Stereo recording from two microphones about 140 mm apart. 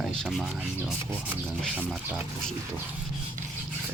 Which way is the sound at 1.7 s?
10° right (ahead or behind).